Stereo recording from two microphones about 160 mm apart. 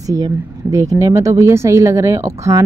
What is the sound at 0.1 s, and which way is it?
Speech, 20° right (ahead or behind).